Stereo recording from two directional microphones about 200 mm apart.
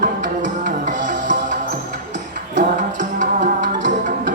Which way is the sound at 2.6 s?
40° right (ahead or behind).